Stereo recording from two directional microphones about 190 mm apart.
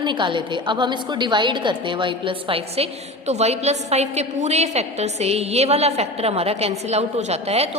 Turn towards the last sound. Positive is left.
turn(degrees=-35)  # may be behind; listen again after turning